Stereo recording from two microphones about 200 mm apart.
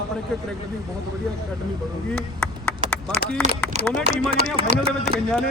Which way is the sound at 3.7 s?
35° right (ahead or behind).